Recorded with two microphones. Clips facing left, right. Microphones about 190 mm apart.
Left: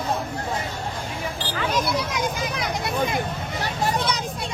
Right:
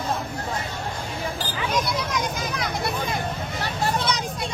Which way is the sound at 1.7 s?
5° left (ahead or behind).